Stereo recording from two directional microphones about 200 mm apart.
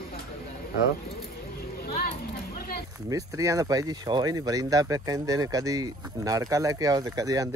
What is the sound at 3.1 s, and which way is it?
Speech, 15° right (ahead or behind).